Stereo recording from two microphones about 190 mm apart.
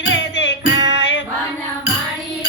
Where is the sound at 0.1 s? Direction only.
70° left (ahead or behind).